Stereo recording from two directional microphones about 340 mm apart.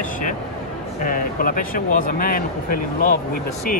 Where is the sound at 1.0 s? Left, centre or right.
Left.